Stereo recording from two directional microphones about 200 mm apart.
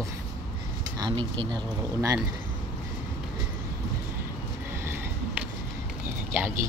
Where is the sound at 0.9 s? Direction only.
20° right (ahead or behind).